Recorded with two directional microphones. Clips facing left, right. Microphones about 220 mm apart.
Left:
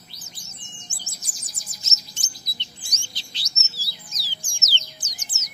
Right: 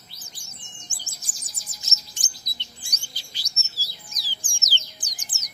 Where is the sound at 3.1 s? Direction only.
10° right (ahead or behind).